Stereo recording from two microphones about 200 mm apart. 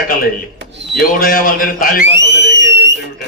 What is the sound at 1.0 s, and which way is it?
A man's voice, 45° left (ahead or behind).